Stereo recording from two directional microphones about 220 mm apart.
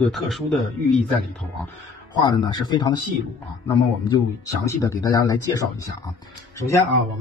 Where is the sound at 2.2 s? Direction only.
20° left (ahead or behind).